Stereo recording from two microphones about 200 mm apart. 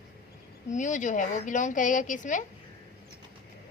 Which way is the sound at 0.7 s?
40° left (ahead or behind).